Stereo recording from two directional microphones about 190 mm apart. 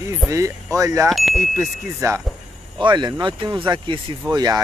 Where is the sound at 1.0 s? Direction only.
Centre (ahead or behind).